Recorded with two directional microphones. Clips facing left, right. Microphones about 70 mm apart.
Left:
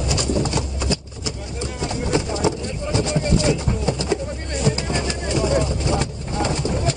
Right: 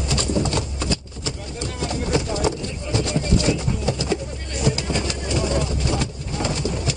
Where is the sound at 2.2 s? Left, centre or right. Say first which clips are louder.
Left 1 dB; left.